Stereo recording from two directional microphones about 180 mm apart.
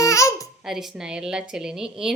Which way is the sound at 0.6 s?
Centre (ahead or behind).